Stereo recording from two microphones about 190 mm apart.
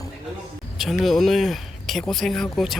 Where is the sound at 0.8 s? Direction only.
Centre (ahead or behind).